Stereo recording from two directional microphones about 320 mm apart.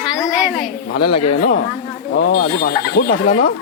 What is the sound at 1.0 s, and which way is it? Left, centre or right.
Speech, left.